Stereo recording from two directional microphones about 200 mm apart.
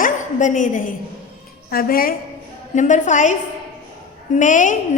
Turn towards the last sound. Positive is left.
turn(degrees=40)  # may be behind; listen again after turning